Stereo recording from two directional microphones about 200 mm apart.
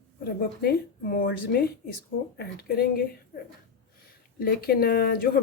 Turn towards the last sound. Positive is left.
turn(degrees=50)  # may be behind; listen again after turning